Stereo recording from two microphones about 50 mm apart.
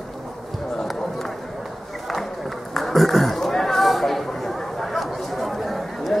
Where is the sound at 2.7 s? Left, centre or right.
Centre.